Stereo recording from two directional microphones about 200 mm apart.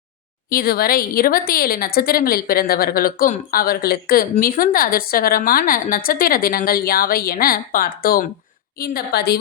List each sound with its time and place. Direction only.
0.5 s a woman's voice: 45° left (ahead or behind)